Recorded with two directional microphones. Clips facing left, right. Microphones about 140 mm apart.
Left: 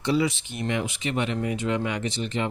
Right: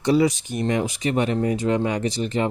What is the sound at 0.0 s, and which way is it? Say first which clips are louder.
Speech: right 5 dB; 40° right (ahead or behind).